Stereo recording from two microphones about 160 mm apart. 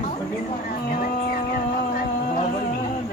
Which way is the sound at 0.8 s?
60° left (ahead or behind).